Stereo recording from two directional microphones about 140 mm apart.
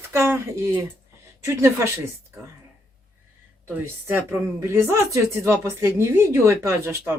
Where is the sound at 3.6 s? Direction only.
15° right (ahead or behind).